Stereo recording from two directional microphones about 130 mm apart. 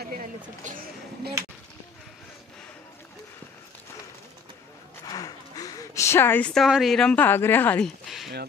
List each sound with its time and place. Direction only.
0.7 s speech: 75° right (ahead or behind)
5.0 s a sound: 30° left (ahead or behind)
6.5 s a woman's voice: centre (ahead or behind)